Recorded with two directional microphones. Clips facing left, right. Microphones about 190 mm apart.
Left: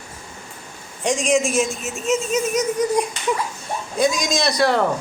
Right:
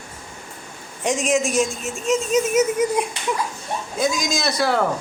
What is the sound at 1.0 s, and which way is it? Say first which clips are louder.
A man's voice: left 1 dB; 5° right (ahead or behind).